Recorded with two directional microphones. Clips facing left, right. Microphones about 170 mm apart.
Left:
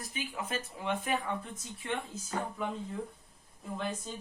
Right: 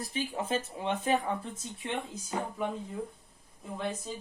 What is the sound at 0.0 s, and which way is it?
Speech, 30° right (ahead or behind).